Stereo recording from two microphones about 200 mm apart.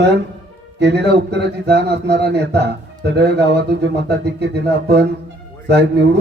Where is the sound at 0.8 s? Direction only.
55° right (ahead or behind).